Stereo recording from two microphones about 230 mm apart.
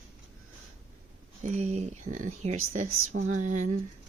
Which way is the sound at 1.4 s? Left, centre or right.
Right.